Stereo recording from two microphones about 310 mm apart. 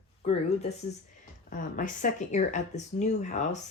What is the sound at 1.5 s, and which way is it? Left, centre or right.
Speech, left.